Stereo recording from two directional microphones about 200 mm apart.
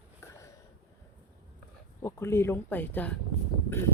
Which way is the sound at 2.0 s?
15° left (ahead or behind).